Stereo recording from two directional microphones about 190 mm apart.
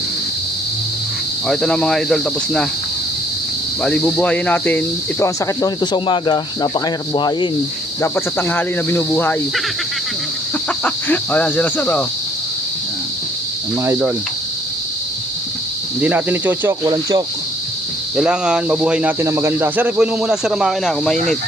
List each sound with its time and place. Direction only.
1.5 s speech: 5° left (ahead or behind)
3.8 s cricket: 5° left (ahead or behind)
5.2 s speech: 20° left (ahead or behind)
8.0 s cricket: 10° left (ahead or behind)
10.8 s cricket: 10° left (ahead or behind)
16.0 s speech: 10° right (ahead or behind)
18.2 s speech: 5° right (ahead or behind)